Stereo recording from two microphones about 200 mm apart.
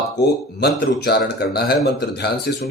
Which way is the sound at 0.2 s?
55° left (ahead or behind).